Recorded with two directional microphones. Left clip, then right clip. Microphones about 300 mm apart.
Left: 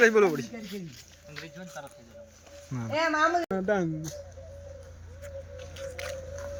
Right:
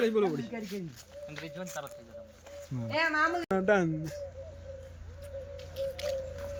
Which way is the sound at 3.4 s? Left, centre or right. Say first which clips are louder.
Right 1 dB; centre.